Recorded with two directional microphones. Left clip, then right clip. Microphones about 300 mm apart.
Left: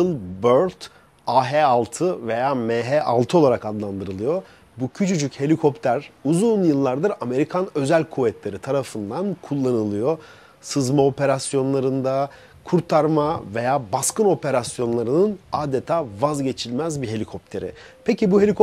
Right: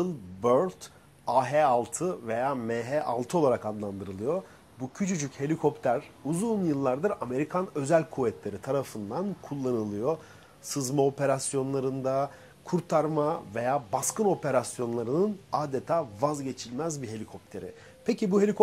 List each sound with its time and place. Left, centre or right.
0.0 s speech: left
18.0 s a man's voice: left